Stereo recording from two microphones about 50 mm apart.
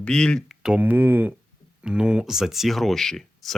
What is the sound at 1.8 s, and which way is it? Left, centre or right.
Speech, centre.